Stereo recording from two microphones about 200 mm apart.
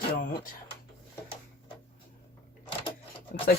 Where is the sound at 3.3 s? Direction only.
45° left (ahead or behind).